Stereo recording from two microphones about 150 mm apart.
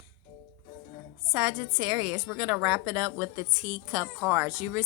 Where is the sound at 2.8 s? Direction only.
5° right (ahead or behind).